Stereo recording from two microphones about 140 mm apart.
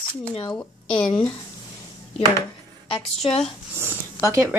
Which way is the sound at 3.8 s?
20° right (ahead or behind).